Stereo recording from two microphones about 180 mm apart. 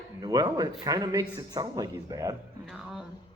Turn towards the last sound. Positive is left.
turn(degrees=0)  # may be behind; listen again after turning